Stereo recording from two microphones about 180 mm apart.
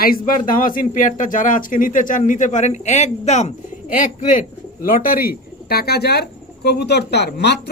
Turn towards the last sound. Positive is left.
turn(degrees=70)  # may be behind; listen again after turning